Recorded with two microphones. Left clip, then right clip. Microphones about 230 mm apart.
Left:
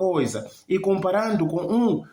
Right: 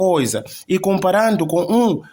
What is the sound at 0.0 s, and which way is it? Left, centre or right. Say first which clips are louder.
A man's voice: right 6 dB; right.